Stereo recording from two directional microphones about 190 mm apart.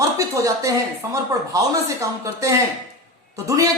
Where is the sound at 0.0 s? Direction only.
15° right (ahead or behind).